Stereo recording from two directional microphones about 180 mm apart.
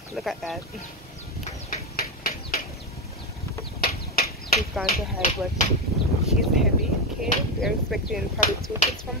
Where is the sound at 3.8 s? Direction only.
60° left (ahead or behind).